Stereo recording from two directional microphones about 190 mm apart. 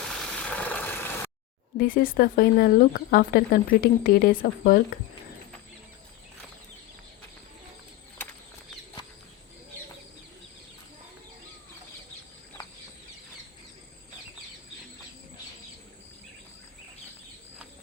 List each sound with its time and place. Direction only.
0.1 s vehicle: 5° left (ahead or behind)
1.8 s speech: 50° left (ahead or behind)